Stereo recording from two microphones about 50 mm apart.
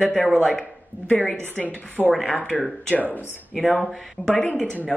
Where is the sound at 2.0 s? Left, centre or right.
Right.